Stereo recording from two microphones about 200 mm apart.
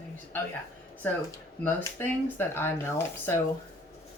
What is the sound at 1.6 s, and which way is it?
Speech, 10° left (ahead or behind).